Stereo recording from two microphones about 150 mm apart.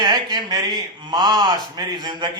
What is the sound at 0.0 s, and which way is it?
Speech, 30° right (ahead or behind).